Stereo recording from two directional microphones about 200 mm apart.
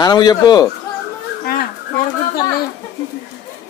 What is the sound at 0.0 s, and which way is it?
Speech, 20° left (ahead or behind).